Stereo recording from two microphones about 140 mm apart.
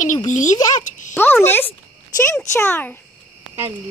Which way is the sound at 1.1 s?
15° left (ahead or behind).